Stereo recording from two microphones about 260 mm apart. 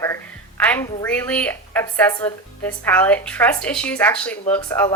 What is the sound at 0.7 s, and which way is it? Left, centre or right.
A woman's voice, centre.